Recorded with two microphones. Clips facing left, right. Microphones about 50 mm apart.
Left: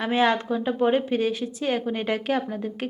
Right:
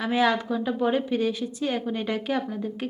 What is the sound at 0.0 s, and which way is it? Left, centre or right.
Speech, left.